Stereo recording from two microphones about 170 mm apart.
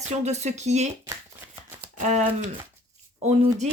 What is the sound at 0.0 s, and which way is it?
Speech, 40° right (ahead or behind).